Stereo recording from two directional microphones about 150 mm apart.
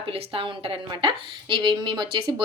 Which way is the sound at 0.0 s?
40° right (ahead or behind).